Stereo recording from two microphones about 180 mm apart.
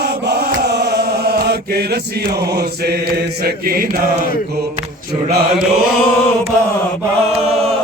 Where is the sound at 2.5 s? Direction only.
65° right (ahead or behind).